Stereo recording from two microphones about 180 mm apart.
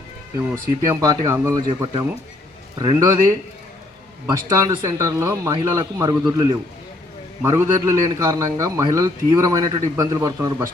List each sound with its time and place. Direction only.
0.9 s a man's voice: 20° right (ahead or behind)
4.3 s a man's voice: 20° right (ahead or behind)